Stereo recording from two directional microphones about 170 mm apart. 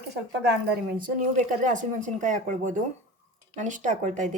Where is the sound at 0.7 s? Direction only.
55° right (ahead or behind).